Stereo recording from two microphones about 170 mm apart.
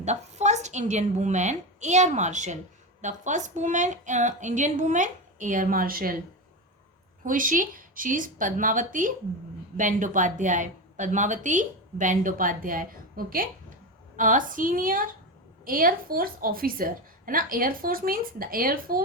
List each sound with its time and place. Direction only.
0.0 s a woman's voice: 40° right (ahead or behind); by 6.1 s 60° right (ahead or behind)
7.3 s a woman's voice: 50° right (ahead or behind)